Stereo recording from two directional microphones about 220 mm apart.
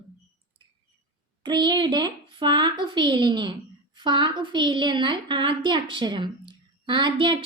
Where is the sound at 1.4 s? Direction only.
20° right (ahead or behind).